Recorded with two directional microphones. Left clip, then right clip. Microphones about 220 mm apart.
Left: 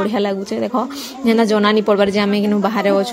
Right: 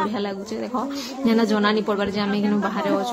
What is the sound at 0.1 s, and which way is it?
A woman's voice, 30° left (ahead or behind).